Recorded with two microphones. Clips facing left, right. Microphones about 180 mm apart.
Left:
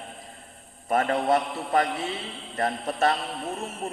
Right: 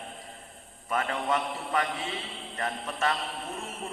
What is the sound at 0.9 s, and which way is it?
A man's voice, 40° left (ahead or behind).